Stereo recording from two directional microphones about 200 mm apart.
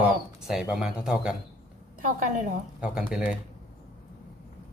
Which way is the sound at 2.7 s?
5° right (ahead or behind).